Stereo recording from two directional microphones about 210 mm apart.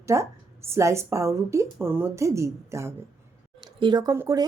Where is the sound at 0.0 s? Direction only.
15° right (ahead or behind).